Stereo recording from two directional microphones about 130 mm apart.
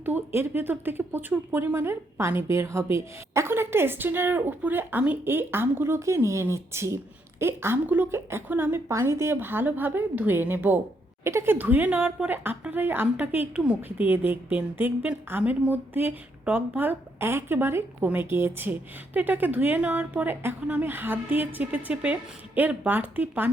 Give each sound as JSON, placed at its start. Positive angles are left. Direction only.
{"t": 0.0, "sound": "speech", "side_deg": -15}